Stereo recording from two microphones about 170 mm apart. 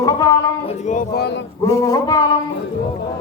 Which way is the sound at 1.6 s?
20° left (ahead or behind).